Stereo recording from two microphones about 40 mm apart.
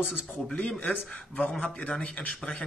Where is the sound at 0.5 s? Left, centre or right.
Left.